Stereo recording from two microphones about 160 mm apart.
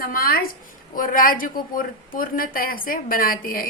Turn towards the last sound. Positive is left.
turn(degrees=65)  # may be behind; listen again after turning